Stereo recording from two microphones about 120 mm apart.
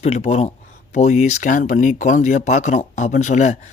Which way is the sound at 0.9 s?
75° left (ahead or behind).